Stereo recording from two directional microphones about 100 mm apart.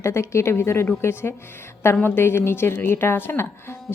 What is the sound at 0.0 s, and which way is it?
A woman's voice, 30° left (ahead or behind).